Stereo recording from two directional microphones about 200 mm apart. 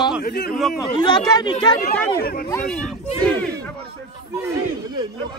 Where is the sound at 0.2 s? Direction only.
50° left (ahead or behind).